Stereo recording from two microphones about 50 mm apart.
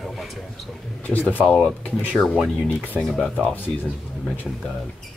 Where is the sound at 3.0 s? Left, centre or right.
Centre.